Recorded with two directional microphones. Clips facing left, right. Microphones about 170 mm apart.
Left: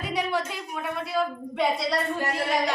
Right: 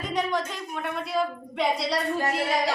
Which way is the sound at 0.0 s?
10° left (ahead or behind).